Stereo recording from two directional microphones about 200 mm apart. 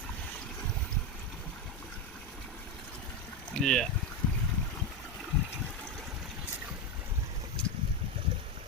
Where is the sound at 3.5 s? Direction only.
Centre (ahead or behind).